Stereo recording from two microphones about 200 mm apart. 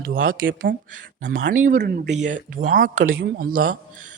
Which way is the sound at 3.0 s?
80° right.